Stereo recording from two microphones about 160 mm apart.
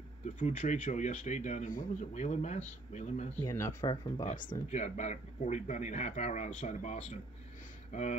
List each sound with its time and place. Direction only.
0.4 s speech: 50° left (ahead or behind)
3.4 s speech: 20° left (ahead or behind)
3.9 s speech: 30° left (ahead or behind)
4.6 s speech: 45° left (ahead or behind)